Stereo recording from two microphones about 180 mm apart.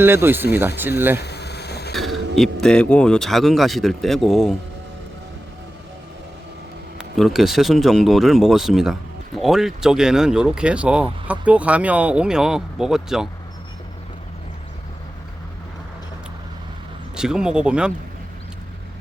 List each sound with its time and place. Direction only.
0.0 s speech: 10° right (ahead or behind)
1.2 s vehicle: 65° left (ahead or behind)
1.9 s speech: centre (ahead or behind)
7.2 s speech: centre (ahead or behind)
17.2 s speech: 5° right (ahead or behind)